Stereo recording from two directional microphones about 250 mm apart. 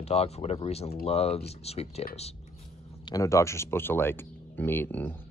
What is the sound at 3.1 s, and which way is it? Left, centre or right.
Speech, centre.